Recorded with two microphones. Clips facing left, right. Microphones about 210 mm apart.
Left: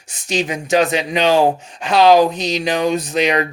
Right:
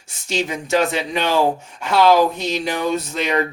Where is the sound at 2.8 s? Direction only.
15° left (ahead or behind).